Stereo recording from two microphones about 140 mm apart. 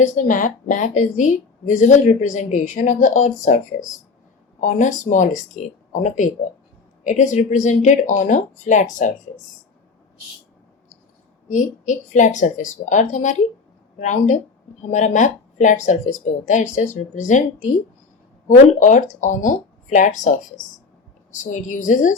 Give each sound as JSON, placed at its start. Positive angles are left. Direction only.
{"t": 0.0, "sound": "a woman's voice", "side_deg": 65}
{"t": 11.4, "sound": "a woman's voice", "side_deg": 60}
{"t": 21.5, "sound": "a woman's voice", "side_deg": 65}